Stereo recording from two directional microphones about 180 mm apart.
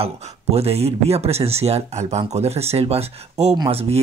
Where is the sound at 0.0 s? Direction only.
35° right (ahead or behind).